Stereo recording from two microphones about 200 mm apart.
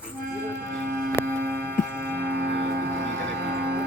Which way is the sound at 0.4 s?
55° right (ahead or behind).